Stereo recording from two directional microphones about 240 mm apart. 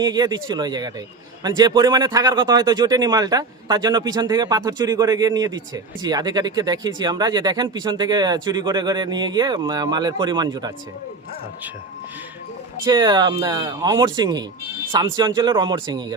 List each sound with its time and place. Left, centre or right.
0.0 s speech: centre
12.8 s speech: centre